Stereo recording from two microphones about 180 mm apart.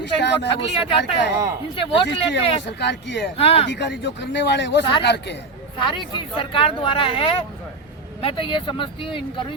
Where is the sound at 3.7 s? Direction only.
70° left (ahead or behind).